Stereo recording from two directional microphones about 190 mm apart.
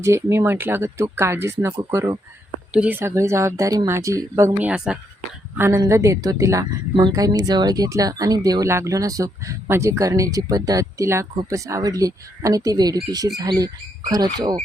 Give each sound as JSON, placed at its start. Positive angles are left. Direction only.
{"t": 0.0, "sound": "a woman's voice", "side_deg": -15}